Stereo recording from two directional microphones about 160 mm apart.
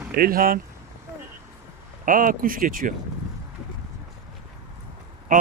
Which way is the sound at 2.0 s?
55° right (ahead or behind).